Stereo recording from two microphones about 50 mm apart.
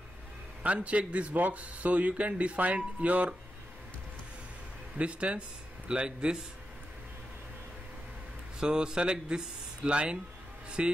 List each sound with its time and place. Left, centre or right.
0.6 s speech: right
4.9 s speech: right
8.5 s speech: centre